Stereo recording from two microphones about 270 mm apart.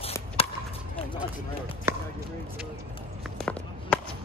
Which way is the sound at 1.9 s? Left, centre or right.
Centre.